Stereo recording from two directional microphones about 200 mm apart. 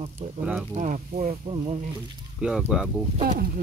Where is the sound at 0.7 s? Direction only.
40° right (ahead or behind).